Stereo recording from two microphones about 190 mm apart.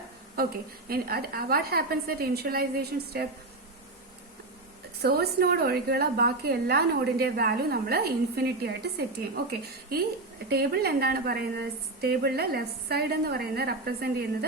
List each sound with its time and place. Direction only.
0.4 s a woman's voice: 55° right (ahead or behind)
5.0 s a woman's voice: 55° right (ahead or behind)
10.5 s a woman's voice: 55° right (ahead or behind)